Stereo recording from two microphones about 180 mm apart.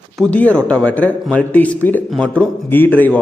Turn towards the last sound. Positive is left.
turn(degrees=10)  # may be behind; listen again after turning